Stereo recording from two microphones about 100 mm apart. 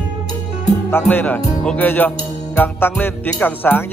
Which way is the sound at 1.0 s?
15° left (ahead or behind).